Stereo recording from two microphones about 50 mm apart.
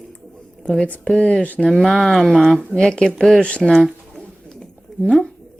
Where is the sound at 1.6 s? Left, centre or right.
Centre.